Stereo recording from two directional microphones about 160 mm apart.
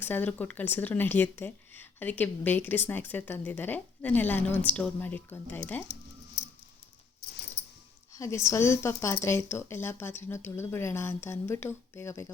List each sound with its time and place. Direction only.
0.0 s speech: 10° left (ahead or behind)
8.1 s speech: 20° left (ahead or behind)